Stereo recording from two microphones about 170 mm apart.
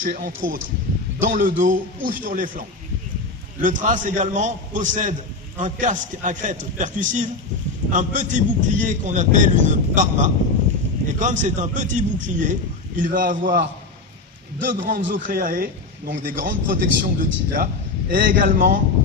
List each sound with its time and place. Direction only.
0.0 s a man's voice: 50° right (ahead or behind)